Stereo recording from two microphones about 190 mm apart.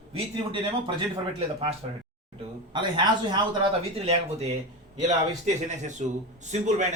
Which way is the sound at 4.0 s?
35° right (ahead or behind).